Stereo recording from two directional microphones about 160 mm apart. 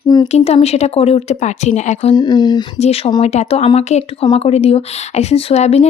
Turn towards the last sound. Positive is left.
turn(degrees=45)  # may be behind; listen again after turning